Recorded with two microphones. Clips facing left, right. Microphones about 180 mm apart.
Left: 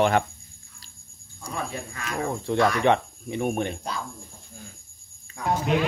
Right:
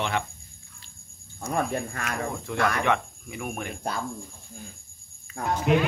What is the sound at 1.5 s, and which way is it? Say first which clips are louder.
Speech: right 5 dB; 55° right (ahead or behind).